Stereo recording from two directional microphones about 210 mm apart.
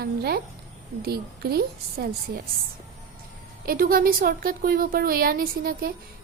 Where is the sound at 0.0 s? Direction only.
50° right (ahead or behind).